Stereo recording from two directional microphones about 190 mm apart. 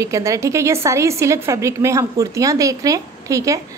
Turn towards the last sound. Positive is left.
turn(degrees=-15)  # may be behind; listen again after turning